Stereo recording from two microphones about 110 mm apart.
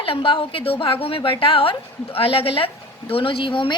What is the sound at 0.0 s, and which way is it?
A woman's voice, 55° left (ahead or behind).